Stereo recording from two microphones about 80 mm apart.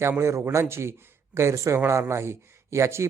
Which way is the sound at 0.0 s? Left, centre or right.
Right.